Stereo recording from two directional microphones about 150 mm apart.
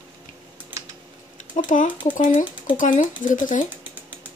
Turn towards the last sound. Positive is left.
turn(degrees=60)  # may be behind; listen again after turning